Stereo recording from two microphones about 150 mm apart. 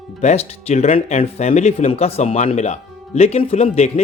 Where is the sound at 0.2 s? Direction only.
50° left (ahead or behind).